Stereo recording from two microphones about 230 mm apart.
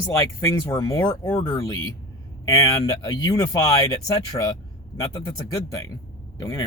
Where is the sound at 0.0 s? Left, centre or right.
Centre.